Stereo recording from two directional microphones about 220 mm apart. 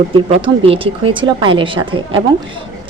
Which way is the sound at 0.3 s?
25° right (ahead or behind).